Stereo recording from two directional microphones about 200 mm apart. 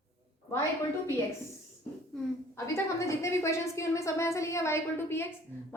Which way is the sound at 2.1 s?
Centre (ahead or behind).